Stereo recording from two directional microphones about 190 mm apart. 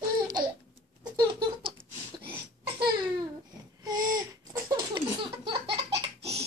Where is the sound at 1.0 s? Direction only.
25° right (ahead or behind).